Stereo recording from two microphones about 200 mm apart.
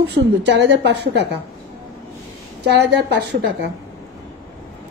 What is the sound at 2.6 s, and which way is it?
A woman's voice, 55° right (ahead or behind).